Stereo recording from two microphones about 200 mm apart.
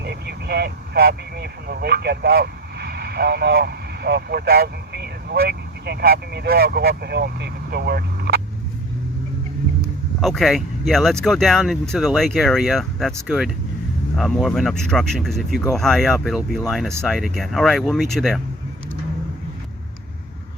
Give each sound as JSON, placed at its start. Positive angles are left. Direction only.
{"t": 0.0, "sound": "speech", "side_deg": -55}
{"t": 10.2, "sound": "speech", "side_deg": 0}